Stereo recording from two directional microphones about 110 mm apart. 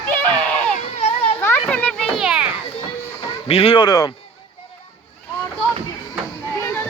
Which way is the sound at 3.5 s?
60° left (ahead or behind).